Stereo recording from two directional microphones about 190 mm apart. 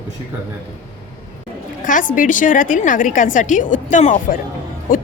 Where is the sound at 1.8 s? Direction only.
45° left (ahead or behind).